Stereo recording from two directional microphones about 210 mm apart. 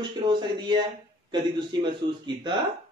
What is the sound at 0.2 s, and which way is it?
Speech, 20° right (ahead or behind).